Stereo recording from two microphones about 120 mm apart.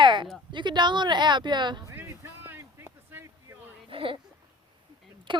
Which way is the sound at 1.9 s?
20° right (ahead or behind).